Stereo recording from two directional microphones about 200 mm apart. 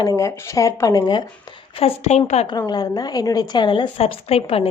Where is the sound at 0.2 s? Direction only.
15° left (ahead or behind); by 2.6 s 30° left (ahead or behind).